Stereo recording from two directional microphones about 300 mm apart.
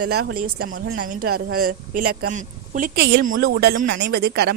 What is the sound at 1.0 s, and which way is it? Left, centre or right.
A woman's voice, right.